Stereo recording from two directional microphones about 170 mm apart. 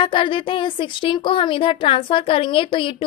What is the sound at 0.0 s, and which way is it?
A woman's voice, 30° left (ahead or behind).